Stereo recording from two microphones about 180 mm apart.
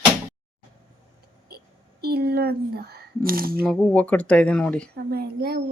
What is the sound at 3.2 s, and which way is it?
Speech, 55° right (ahead or behind).